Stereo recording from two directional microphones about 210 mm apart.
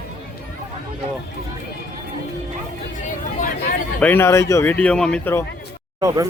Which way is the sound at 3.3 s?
40° left (ahead or behind).